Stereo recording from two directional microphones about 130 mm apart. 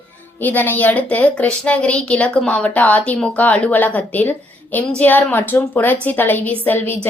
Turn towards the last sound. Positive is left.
turn(degrees=15)  # may be behind; listen again after turning